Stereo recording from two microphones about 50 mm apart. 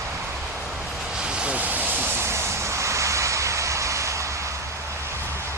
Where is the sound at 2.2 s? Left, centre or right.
Right.